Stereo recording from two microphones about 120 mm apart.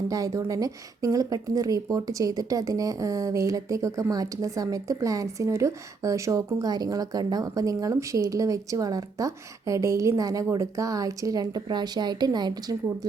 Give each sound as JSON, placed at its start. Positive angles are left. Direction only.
{"t": 0.1, "sound": "speech", "side_deg": -30}